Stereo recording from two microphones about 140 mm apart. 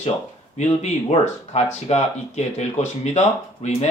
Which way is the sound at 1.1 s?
50° left (ahead or behind).